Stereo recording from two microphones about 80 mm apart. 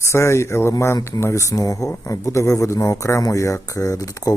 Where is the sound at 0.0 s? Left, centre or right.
Left.